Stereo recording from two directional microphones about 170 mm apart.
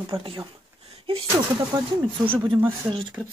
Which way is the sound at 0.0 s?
30° right (ahead or behind).